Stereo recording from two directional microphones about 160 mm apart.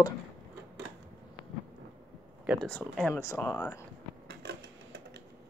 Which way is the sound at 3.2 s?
20° left (ahead or behind).